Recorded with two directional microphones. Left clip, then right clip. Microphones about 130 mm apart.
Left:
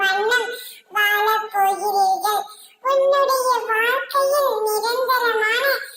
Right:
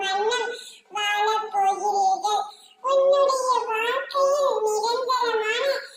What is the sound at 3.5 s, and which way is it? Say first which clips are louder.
Child singing: left 4 dB; 60° left (ahead or behind).